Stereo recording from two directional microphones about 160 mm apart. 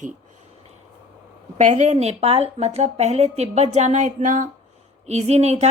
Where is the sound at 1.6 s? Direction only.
45° right (ahead or behind).